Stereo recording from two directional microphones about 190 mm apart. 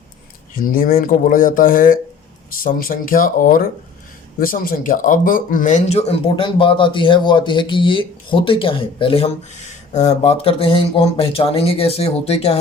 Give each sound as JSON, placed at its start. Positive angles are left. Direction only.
{"t": 0.5, "sound": "speech", "side_deg": 45}